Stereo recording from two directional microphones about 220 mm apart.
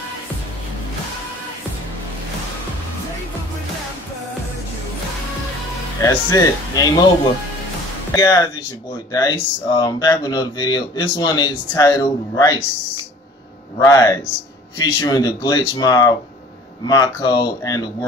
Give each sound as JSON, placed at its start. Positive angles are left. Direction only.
{"t": 6.0, "sound": "speech", "side_deg": 15}
{"t": 8.1, "sound": "speech", "side_deg": 15}
{"t": 13.7, "sound": "speech", "side_deg": 15}